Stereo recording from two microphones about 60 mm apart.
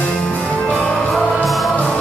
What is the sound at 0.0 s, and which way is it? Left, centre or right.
Music, left.